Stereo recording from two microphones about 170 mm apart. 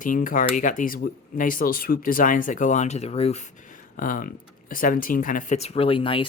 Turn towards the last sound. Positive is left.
turn(degrees=30)  # may be behind; listen again after turning